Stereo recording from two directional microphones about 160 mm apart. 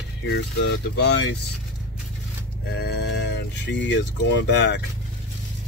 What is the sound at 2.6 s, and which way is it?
Speech, 90° left.